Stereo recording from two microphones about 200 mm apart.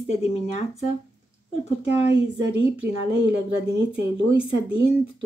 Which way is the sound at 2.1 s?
65° right (ahead or behind).